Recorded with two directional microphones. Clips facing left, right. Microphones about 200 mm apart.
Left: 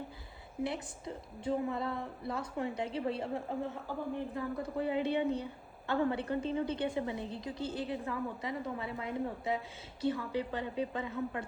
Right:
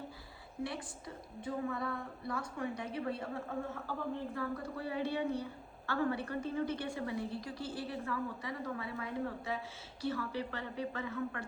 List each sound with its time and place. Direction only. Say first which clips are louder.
0.6 s a woman's voice: left 4 dB; 25° left (ahead or behind)